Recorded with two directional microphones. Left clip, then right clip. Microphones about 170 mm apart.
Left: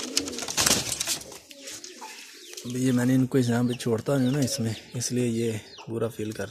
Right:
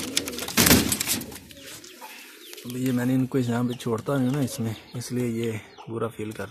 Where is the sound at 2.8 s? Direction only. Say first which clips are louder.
Left 1 dB; 15° left (ahead or behind).